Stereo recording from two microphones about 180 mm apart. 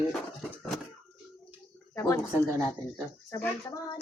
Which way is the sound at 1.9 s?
15° left (ahead or behind).